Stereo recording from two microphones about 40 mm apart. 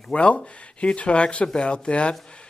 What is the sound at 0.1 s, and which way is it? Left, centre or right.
Speech, left.